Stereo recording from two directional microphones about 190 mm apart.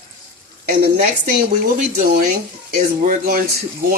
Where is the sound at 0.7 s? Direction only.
50° right (ahead or behind).